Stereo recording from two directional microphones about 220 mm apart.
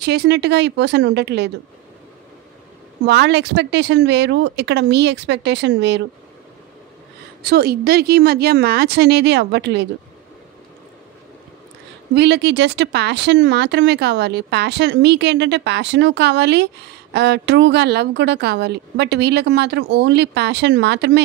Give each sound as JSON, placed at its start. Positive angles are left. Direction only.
{"t": 0.0, "sound": "speech", "side_deg": -50}
{"t": 3.1, "sound": "speech", "side_deg": -50}
{"t": 7.4, "sound": "speech", "side_deg": -45}
{"t": 12.2, "sound": "speech", "side_deg": -50}